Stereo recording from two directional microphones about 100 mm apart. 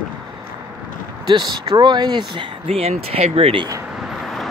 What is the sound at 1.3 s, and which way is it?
Speech, 45° right (ahead or behind).